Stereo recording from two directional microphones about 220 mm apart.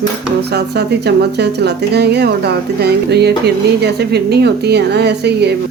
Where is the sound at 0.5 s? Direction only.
50° right (ahead or behind).